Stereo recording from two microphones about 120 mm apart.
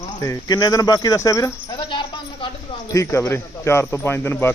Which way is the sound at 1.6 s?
40° left (ahead or behind).